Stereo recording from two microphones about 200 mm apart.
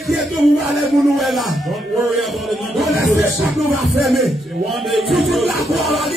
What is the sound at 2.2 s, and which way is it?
Music, centre (ahead or behind).